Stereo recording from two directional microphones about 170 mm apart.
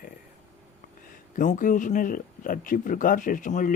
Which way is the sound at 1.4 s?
50° left (ahead or behind).